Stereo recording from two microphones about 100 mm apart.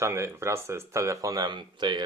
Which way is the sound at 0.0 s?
25° right (ahead or behind).